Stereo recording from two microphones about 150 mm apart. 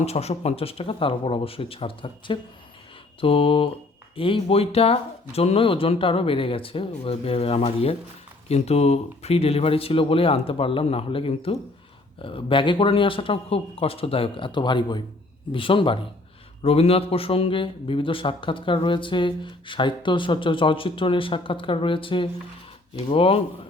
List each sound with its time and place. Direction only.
0.0 s speech: 45° left (ahead or behind)